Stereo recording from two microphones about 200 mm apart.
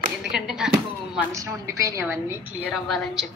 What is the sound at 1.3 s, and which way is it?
A woman's voice, 15° right (ahead or behind).